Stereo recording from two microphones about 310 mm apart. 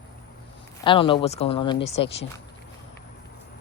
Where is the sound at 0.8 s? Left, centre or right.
Centre.